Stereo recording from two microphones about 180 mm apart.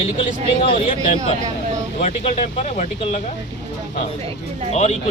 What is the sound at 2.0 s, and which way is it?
A man's voice, 40° left (ahead or behind).